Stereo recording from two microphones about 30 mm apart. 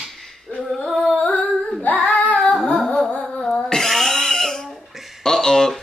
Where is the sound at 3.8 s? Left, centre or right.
Centre.